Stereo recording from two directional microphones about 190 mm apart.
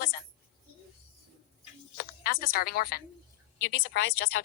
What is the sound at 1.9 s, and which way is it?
A woman's voice, 50° left (ahead or behind).